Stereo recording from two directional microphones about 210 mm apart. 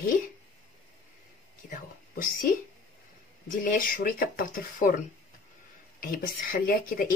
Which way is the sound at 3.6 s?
40° left (ahead or behind).